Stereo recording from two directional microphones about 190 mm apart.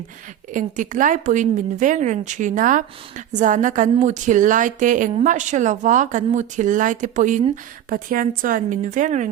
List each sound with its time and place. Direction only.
0.5 s a woman's voice: 45° right (ahead or behind)